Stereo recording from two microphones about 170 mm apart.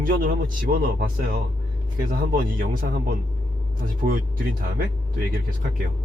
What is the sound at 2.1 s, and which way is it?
Speech, 55° right (ahead or behind).